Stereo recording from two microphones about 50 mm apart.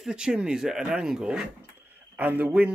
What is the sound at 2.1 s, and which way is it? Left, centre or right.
Speech, right.